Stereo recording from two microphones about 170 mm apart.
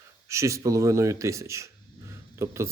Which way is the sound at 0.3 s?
15° right (ahead or behind).